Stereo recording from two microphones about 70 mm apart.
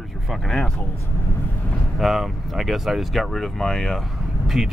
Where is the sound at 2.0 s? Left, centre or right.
Centre.